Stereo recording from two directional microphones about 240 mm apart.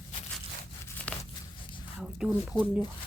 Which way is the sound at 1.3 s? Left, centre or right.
Left.